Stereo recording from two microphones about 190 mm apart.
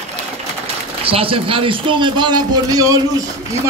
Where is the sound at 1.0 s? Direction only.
30° right (ahead or behind).